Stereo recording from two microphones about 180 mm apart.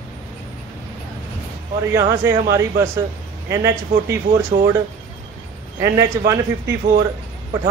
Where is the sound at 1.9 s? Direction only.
15° right (ahead or behind).